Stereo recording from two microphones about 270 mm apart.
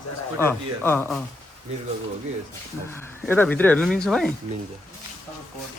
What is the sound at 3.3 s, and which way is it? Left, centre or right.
Speech, centre.